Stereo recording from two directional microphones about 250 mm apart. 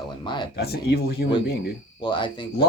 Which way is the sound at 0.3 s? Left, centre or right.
Centre.